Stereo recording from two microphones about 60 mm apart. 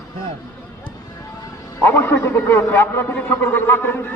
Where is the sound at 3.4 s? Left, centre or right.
Left.